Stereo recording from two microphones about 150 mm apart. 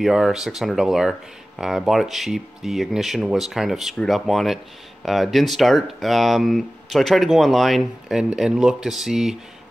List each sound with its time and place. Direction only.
0.0 s speech: 5° right (ahead or behind)